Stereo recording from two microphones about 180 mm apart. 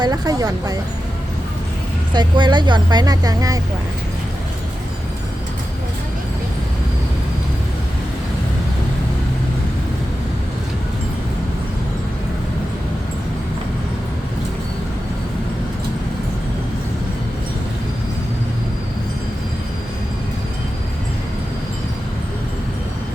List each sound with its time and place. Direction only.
0.0 s speech: 20° right (ahead or behind)
2.1 s speech: 25° right (ahead or behind)